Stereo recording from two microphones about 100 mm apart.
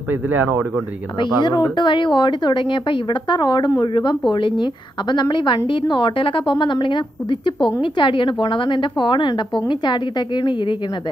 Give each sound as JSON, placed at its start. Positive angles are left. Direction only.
{"t": 0.1, "sound": "a man's voice", "side_deg": -20}
{"t": 1.2, "sound": "a woman's voice", "side_deg": 50}